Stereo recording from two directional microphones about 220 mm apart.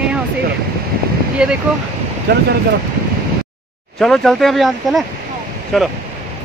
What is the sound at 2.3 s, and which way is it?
Speech, 50° right (ahead or behind).